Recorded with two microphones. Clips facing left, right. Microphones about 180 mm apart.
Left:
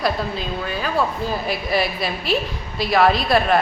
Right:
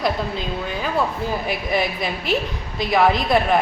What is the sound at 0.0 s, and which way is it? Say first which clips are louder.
Speech: even; 20° right (ahead or behind).